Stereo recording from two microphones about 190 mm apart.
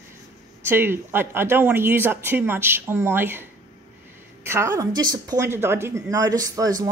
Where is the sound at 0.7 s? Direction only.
10° right (ahead or behind).